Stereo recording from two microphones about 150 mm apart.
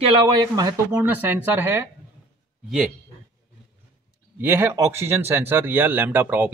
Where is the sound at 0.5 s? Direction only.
25° right (ahead or behind).